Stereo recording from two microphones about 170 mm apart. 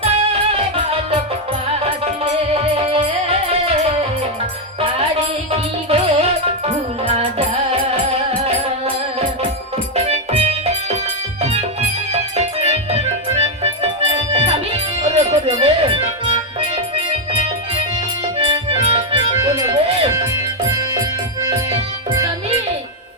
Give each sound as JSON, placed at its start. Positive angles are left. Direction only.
{"t": 0.0, "sound": "music", "side_deg": -35}
{"t": 5.5, "sound": "music", "side_deg": -35}
{"t": 9.9, "sound": "music", "side_deg": -35}
{"t": 12.1, "sound": "music", "side_deg": -35}
{"t": 18.3, "sound": "accordion", "side_deg": -35}
{"t": 19.5, "sound": "music", "side_deg": -35}